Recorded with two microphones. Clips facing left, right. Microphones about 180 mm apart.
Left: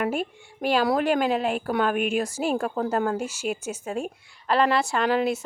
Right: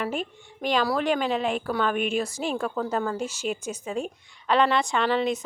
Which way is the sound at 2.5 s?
45° left (ahead or behind).